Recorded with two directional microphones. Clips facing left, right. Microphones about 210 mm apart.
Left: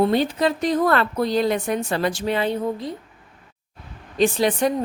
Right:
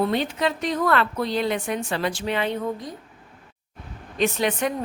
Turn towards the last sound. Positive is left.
turn(degrees=35)  # may be behind; listen again after turning